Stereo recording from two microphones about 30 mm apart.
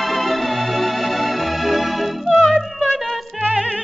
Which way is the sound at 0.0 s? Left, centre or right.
Centre.